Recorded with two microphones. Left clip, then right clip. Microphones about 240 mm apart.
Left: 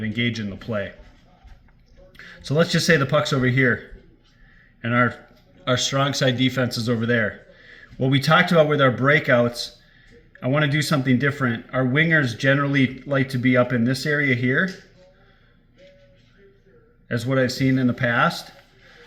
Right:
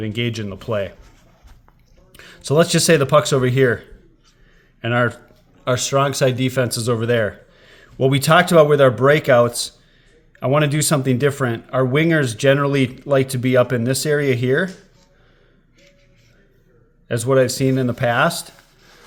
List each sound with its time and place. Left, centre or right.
2.1 s speech: right
4.8 s speech: right
17.1 s speech: right